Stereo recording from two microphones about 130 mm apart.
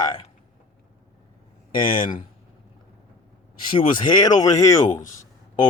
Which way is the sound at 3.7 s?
40° left (ahead or behind).